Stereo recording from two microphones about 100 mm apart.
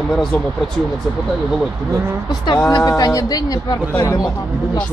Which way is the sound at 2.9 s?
35° left (ahead or behind).